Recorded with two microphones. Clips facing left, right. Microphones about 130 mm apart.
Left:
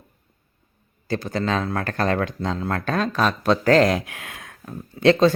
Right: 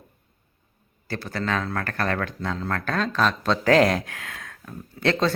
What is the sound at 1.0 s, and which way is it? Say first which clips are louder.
A man's voice: left 4 dB; 20° left (ahead or behind).